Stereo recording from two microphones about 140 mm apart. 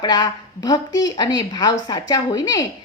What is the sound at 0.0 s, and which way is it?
A woman's voice, 30° left (ahead or behind).